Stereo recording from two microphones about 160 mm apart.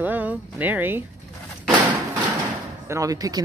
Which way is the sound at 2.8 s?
20° right (ahead or behind).